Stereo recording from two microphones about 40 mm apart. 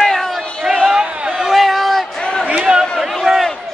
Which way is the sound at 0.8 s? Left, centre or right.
Centre.